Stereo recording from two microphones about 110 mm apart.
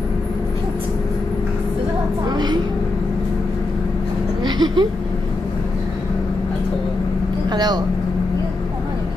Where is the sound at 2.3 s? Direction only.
40° right (ahead or behind).